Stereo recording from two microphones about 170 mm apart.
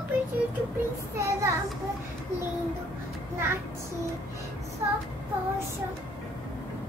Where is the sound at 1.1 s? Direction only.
15° right (ahead or behind).